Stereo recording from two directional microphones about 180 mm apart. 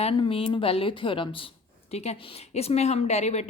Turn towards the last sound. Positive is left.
turn(degrees=40)  # may be behind; listen again after turning